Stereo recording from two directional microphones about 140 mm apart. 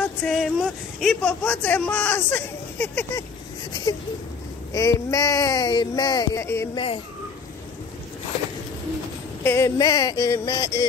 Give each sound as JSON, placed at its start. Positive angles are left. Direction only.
{"t": 0.2, "sound": "speech", "side_deg": 0}
{"t": 4.7, "sound": "speech", "side_deg": 25}
{"t": 9.4, "sound": "speech", "side_deg": 15}
{"t": 9.8, "sound": "speech", "side_deg": 25}